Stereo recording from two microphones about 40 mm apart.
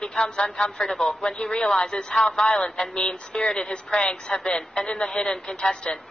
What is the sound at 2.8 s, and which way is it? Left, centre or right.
A woman's voice, centre.